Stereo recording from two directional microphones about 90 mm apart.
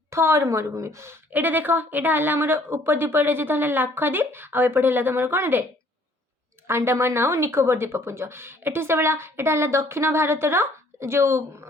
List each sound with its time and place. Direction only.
0.1 s a woman's voice: 30° right (ahead or behind)
1.3 s speech: 20° right (ahead or behind)
6.7 s speech: 30° right (ahead or behind)